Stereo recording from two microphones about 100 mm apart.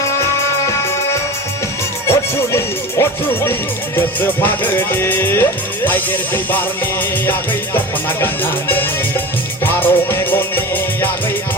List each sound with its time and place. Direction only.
2.0 s music: 30° left (ahead or behind)
8.2 s music: 20° left (ahead or behind)